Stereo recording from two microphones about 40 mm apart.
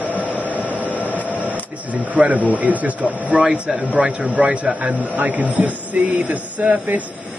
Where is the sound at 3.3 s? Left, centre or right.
Right.